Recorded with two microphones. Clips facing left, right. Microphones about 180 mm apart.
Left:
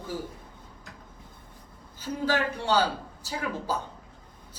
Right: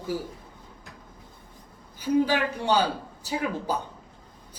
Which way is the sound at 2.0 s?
15° right (ahead or behind).